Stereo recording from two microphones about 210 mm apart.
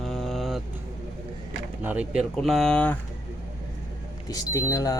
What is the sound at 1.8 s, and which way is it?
Speech, 5° right (ahead or behind).